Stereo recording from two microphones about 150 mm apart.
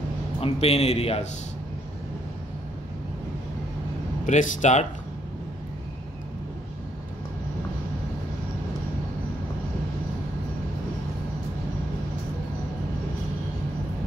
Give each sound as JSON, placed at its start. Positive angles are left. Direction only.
{"t": 0.4, "sound": "a man's voice", "side_deg": 40}
{"t": 4.3, "sound": "a man's voice", "side_deg": 55}